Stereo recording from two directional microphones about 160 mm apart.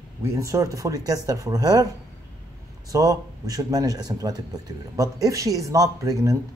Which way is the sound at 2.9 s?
20° right (ahead or behind).